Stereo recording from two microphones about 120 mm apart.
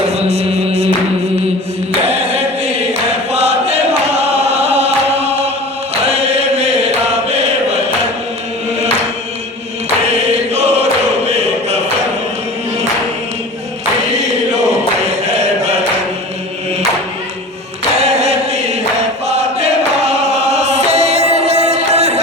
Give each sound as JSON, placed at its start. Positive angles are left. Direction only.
{"t": 0.3, "sound": "music", "side_deg": -60}
{"t": 2.0, "sound": "chant", "side_deg": -60}
{"t": 11.3, "sound": "choir", "side_deg": -60}
{"t": 18.0, "sound": "chant", "side_deg": -60}